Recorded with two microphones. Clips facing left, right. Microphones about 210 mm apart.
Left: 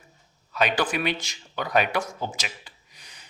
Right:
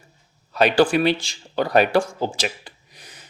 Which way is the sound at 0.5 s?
35° right (ahead or behind).